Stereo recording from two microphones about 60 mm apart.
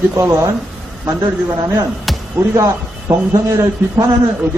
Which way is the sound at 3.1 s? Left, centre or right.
Right.